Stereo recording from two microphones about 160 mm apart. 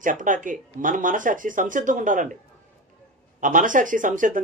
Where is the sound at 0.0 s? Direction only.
55° right (ahead or behind).